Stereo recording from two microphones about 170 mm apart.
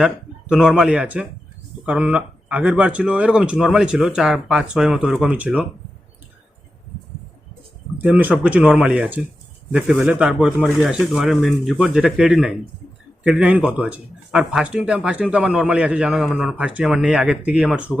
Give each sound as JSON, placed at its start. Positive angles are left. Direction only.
{"t": 0.0, "sound": "speech", "side_deg": -5}
{"t": 7.9, "sound": "speech", "side_deg": -10}